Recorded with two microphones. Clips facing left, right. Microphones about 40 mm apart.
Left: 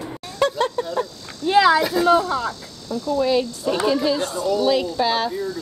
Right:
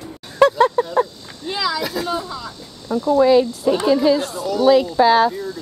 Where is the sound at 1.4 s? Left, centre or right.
Left.